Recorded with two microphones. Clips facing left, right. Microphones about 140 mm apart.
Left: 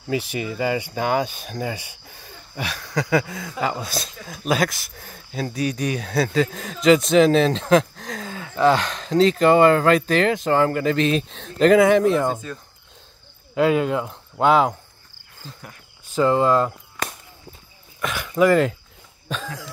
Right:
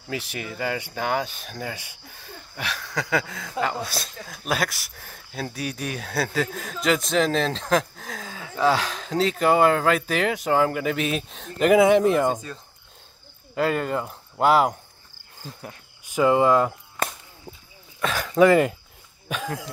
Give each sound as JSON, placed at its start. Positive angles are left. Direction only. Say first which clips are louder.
{"t": 0.1, "sound": "speech", "louder": "left 7 dB", "side_deg": 0}
{"t": 13.6, "sound": "speech", "louder": "left 5 dB", "side_deg": 0}
{"t": 16.1, "sound": "speech", "louder": "even", "side_deg": -15}
{"t": 18.0, "sound": "speech", "louder": "right 1 dB", "side_deg": -40}
{"t": 18.3, "sound": "speech", "louder": "even", "side_deg": -15}
{"t": 19.4, "sound": "cough", "louder": "right 3 dB", "side_deg": -55}